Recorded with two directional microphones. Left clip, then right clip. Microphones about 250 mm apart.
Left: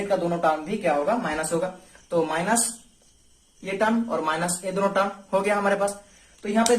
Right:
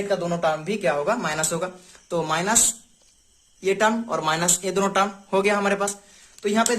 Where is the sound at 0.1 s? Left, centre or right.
Right.